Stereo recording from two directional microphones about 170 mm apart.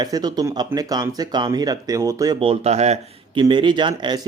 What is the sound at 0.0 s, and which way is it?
Speech, 25° right (ahead or behind).